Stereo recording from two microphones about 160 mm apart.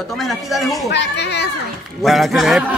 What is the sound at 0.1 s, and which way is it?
Speech, centre (ahead or behind).